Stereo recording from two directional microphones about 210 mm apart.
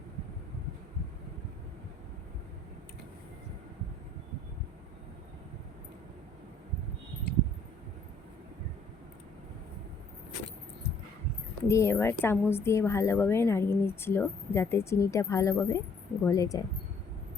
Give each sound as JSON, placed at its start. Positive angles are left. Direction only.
{"t": 11.7, "sound": "a woman's voice", "side_deg": 15}